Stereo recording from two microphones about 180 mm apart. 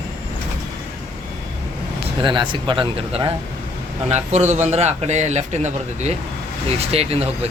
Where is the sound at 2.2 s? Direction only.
25° right (ahead or behind).